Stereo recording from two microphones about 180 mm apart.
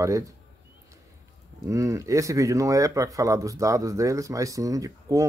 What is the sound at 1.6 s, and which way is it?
Speech, 15° right (ahead or behind).